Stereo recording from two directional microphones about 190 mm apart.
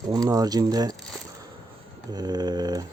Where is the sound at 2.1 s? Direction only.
20° right (ahead or behind).